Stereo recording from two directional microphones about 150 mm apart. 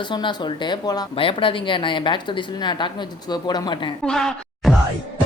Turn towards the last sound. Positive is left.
turn(degrees=0)  # may be behind; listen again after turning